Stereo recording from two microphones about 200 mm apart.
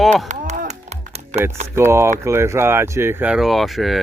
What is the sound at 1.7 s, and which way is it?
Speech, 15° right (ahead or behind).